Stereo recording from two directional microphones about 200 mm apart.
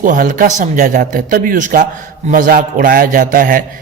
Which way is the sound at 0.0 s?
40° right (ahead or behind).